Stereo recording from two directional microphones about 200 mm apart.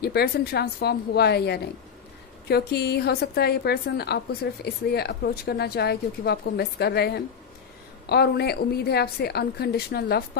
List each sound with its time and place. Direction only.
0.0 s a woman's voice: 50° left (ahead or behind)